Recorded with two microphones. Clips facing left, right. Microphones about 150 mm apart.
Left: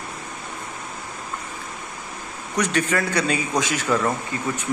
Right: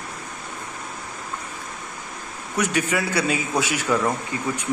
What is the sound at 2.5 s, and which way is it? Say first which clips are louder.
A man's voice: left 1 dB; 10° right (ahead or behind).